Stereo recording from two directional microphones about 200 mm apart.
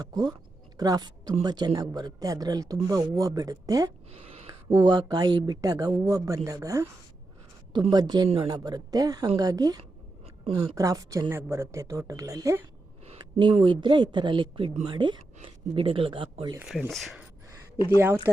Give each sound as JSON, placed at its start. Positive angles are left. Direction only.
{"t": 0.0, "sound": "a man's voice", "side_deg": -20}
{"t": 4.1, "sound": "a sound", "side_deg": -30}
{"t": 4.8, "sound": "a man's voice", "side_deg": -20}
{"t": 13.1, "sound": "a man's voice", "side_deg": -25}
{"t": 16.6, "sound": "speech", "side_deg": -5}
{"t": 17.8, "sound": "speech", "side_deg": -10}